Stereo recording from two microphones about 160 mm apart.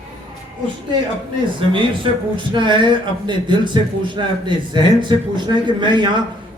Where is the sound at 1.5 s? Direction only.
30° right (ahead or behind).